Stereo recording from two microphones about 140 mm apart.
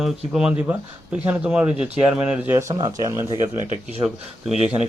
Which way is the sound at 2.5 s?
20° right (ahead or behind).